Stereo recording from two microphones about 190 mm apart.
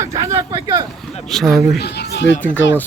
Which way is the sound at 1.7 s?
60° left (ahead or behind).